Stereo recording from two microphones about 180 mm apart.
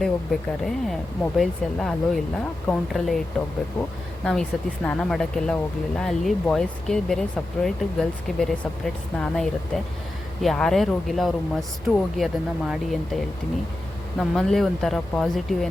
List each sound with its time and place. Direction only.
0.0 s speech: centre (ahead or behind)
4.3 s speech: 5° left (ahead or behind)
14.2 s speech: centre (ahead or behind)